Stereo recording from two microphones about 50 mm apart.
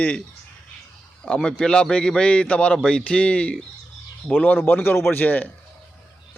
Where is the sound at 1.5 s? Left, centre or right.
Centre.